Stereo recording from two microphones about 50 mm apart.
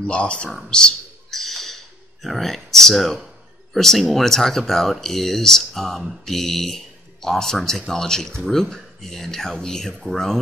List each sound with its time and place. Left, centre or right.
0.0 s speech: left
1.3 s a sound: centre
3.7 s speech: centre